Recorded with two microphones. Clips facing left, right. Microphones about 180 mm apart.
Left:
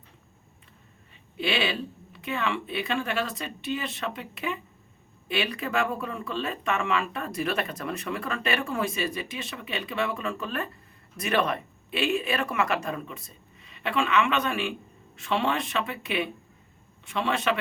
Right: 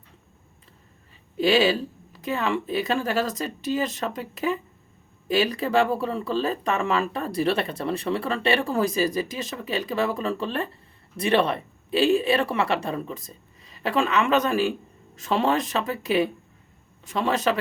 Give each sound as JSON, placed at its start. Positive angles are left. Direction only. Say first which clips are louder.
{"t": 1.4, "sound": "speech", "louder": "right 8 dB", "side_deg": -40}